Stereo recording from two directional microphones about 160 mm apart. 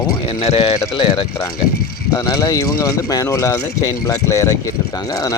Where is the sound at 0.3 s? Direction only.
35° left (ahead or behind).